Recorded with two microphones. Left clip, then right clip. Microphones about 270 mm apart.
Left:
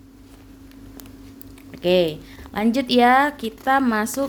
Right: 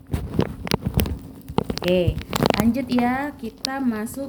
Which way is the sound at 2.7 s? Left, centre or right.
Left.